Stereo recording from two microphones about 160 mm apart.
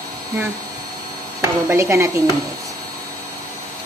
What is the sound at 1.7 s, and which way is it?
Speech, 15° right (ahead or behind).